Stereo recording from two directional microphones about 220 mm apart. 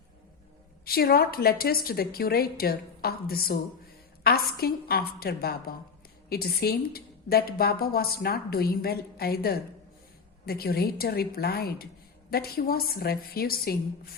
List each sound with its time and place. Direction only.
0.9 s a woman's voice: 45° left (ahead or behind)